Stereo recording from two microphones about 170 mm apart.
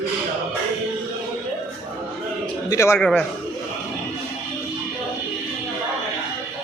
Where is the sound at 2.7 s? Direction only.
15° left (ahead or behind).